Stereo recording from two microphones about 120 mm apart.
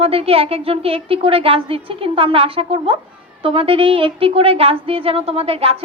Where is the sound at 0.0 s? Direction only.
55° right (ahead or behind).